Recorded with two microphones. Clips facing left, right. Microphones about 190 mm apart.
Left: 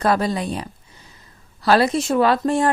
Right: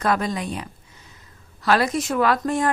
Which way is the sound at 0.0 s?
35° left (ahead or behind).